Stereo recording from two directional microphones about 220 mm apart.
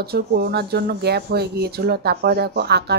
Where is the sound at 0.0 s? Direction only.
45° right (ahead or behind).